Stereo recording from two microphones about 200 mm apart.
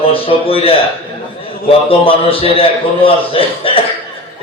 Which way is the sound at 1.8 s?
25° left (ahead or behind).